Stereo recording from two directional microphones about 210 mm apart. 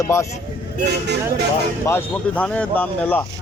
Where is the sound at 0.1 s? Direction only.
15° left (ahead or behind).